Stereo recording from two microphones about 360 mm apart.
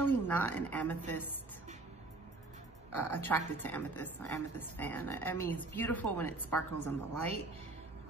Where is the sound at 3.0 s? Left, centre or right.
Centre.